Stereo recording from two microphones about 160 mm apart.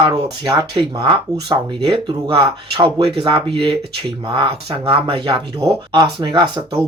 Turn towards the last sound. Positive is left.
turn(degrees=-25)  # may be behind; listen again after turning